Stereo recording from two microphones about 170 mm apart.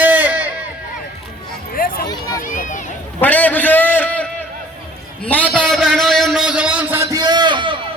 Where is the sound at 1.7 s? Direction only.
60° left (ahead or behind).